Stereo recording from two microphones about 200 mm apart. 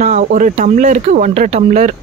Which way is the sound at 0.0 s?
40° right (ahead or behind).